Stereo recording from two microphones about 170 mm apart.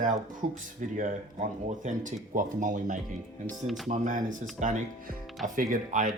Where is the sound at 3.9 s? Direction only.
50° right (ahead or behind).